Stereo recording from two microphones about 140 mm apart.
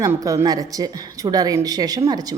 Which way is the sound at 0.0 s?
25° right (ahead or behind).